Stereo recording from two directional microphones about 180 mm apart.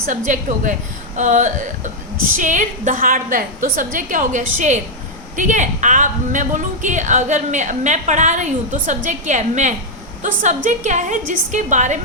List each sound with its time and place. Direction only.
0.3 s a woman's voice: 45° right (ahead or behind)